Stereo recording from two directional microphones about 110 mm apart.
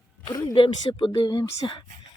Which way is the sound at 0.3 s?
35° left (ahead or behind).